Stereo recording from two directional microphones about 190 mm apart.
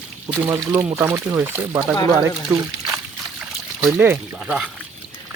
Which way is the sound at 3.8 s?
5° right (ahead or behind).